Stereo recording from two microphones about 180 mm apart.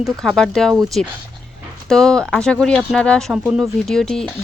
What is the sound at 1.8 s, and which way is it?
Speech, 5° left (ahead or behind).